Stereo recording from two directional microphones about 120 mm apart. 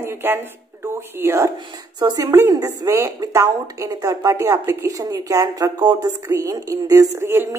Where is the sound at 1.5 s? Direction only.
40° right (ahead or behind).